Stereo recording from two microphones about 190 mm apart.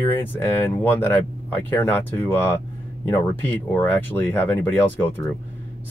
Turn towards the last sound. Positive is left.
turn(degrees=10)  # may be behind; listen again after turning